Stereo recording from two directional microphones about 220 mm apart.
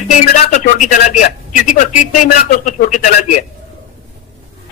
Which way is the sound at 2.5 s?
35° left (ahead or behind).